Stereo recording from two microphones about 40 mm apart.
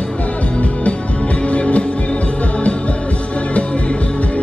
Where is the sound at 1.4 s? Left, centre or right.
Left.